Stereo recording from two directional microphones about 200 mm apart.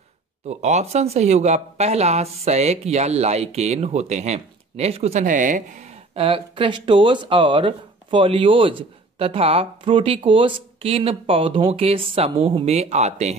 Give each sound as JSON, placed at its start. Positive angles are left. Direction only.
{"t": 0.5, "sound": "speech", "side_deg": -35}